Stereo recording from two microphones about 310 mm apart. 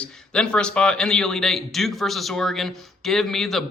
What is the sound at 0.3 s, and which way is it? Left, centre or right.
A man's voice, centre.